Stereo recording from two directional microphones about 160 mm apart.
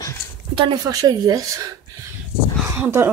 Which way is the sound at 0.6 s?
30° right (ahead or behind).